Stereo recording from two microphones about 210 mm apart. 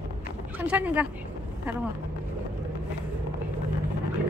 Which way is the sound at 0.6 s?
10° right (ahead or behind).